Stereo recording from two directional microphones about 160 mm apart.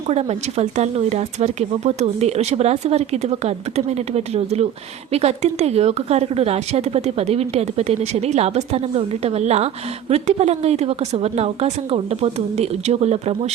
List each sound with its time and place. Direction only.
0.1 s speech: 40° right (ahead or behind)